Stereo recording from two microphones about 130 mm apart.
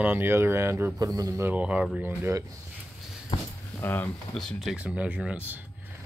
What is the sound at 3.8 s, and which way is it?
Speech, 15° left (ahead or behind).